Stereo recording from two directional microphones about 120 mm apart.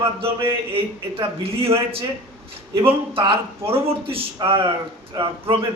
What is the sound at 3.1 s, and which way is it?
Speech, 50° right (ahead or behind).